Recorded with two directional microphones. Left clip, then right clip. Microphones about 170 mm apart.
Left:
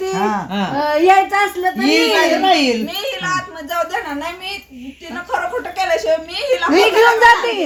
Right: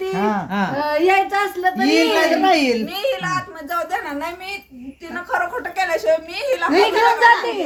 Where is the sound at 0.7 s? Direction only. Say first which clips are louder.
Left 5 dB; 50° left (ahead or behind).